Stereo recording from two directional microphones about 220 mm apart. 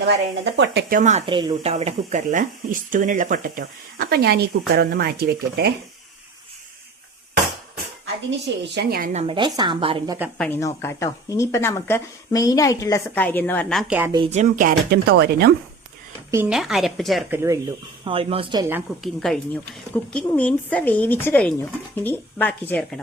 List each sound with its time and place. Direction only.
0.0 s speech: 50° right (ahead or behind)
1.3 s speech: 20° right (ahead or behind); by 5.7 s 45° right (ahead or behind)
8.3 s speech: 50° right (ahead or behind)
9.2 s speech: 25° right (ahead or behind)
10.3 s a woman's voice: 5° left (ahead or behind)
14.0 s a woman's voice: 20° right (ahead or behind)
14.3 s speech: 35° right (ahead or behind)
16.3 s a woman's voice: 5° right (ahead or behind)
17.3 s a woman's voice: 10° right (ahead or behind)
18.0 s speech: 25° right (ahead or behind)
18.7 s a woman's voice: centre (ahead or behind)